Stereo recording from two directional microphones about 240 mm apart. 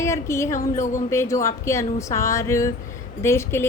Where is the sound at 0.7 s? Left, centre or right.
Left.